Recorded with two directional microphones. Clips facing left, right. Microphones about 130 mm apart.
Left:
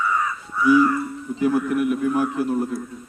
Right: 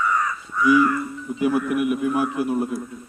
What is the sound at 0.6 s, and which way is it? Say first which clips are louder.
Crow: even; 10° left (ahead or behind).